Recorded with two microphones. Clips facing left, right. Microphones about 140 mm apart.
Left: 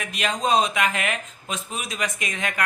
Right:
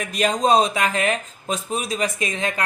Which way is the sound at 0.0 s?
40° right (ahead or behind).